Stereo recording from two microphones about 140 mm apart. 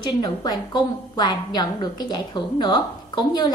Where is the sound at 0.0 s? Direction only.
30° left (ahead or behind).